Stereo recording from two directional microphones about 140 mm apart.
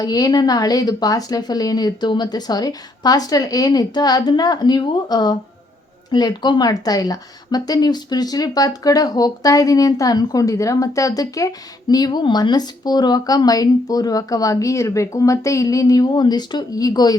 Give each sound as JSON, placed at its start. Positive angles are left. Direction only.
{"t": 0.0, "sound": "speech", "side_deg": 25}